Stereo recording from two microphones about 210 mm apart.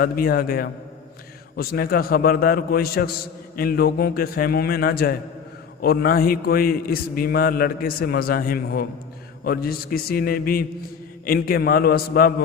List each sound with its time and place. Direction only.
0.0 s a man's voice: 45° left (ahead or behind)